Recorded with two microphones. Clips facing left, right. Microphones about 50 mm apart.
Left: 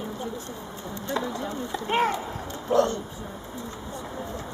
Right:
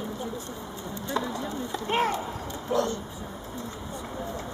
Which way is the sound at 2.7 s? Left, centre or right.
Left.